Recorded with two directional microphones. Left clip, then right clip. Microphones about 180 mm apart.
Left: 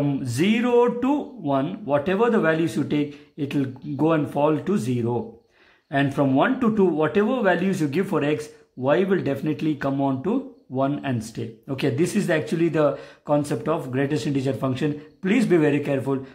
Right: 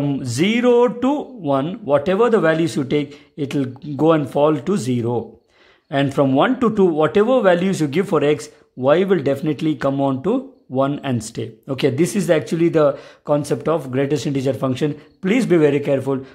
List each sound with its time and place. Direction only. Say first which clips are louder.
0.0 s speech: right 3 dB; 45° right (ahead or behind)